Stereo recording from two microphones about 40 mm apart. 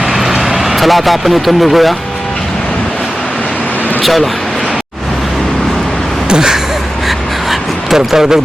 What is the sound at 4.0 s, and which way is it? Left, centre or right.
Speech, centre.